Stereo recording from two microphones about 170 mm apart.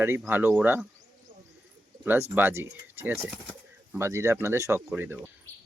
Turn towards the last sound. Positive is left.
turn(degrees=-10)  # may be behind; listen again after turning